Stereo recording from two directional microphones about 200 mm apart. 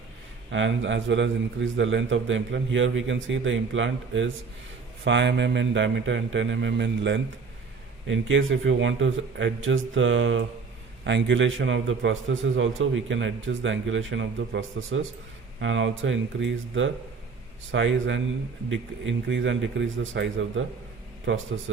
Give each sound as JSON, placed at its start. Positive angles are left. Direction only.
{"t": 0.5, "sound": "a man's voice", "side_deg": -70}